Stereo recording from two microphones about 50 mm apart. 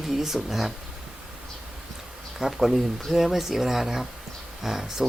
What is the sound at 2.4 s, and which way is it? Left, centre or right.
Speech, centre.